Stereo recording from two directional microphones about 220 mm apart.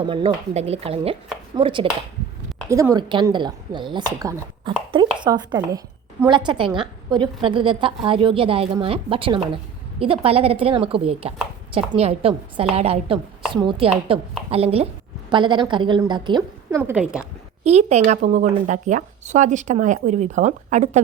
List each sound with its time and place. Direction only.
0.0 s speech: 20° right (ahead or behind); by 17.2 s 5° right (ahead or behind)
17.6 s speech: 30° right (ahead or behind)